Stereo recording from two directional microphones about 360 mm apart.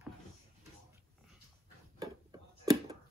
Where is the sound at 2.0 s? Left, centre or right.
Centre.